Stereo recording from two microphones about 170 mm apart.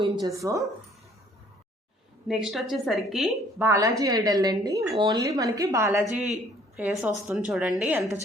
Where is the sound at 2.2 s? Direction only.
Centre (ahead or behind).